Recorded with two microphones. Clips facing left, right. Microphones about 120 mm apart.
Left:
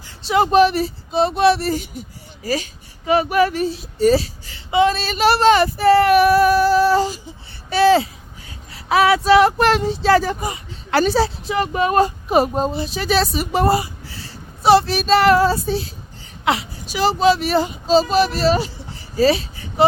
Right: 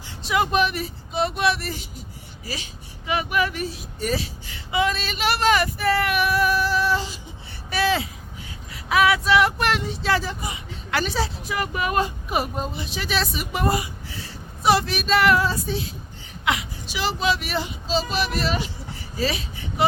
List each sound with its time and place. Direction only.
0.2 s speech: 30° left (ahead or behind)
2.4 s speech: 45° left (ahead or behind)
7.7 s speech: 30° left (ahead or behind)
10.2 s speech: 45° left (ahead or behind)
19.1 s a sound: 35° left (ahead or behind)